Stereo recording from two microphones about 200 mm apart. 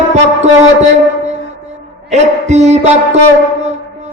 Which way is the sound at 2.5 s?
35° right (ahead or behind).